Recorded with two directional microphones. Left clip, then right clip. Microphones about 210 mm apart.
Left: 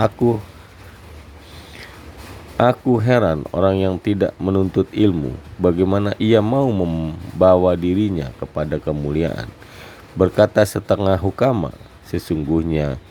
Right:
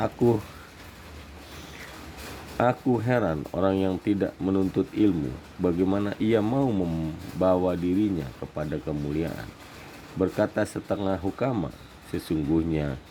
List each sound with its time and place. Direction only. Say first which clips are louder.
2.6 s a man's voice: left 8 dB; 10° left (ahead or behind)